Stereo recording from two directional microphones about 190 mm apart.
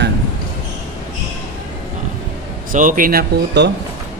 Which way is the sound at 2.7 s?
45° right (ahead or behind).